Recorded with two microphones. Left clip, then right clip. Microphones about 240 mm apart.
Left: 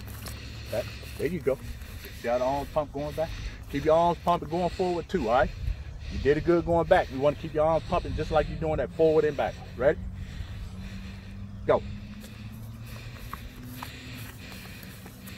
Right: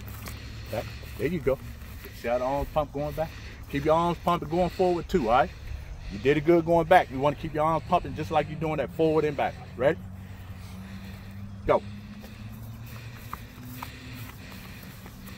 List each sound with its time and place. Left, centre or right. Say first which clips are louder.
0.7 s speech: left 2 dB; right
4.6 s speech: right 2 dB; centre
5.1 s speech: left 1 dB; right